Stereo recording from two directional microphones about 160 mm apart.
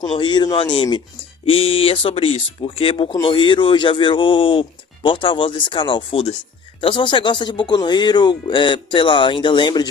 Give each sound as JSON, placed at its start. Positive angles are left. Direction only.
{"t": 0.1, "sound": "speech", "side_deg": 30}